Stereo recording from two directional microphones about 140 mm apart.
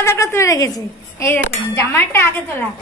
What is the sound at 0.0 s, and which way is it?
A woman's voice, 20° left (ahead or behind).